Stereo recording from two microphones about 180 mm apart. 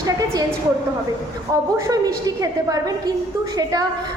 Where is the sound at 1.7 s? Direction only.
20° right (ahead or behind).